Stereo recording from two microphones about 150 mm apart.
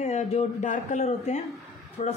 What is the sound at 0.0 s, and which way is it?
A man's voice, 45° left (ahead or behind).